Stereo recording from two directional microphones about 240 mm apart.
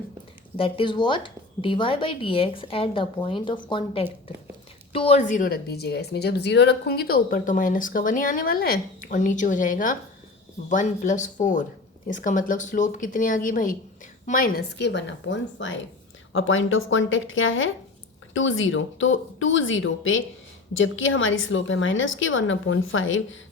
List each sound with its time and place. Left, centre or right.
0.5 s a woman's voice: left